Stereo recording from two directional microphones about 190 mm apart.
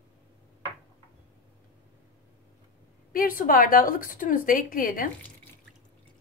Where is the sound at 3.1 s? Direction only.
50° left (ahead or behind).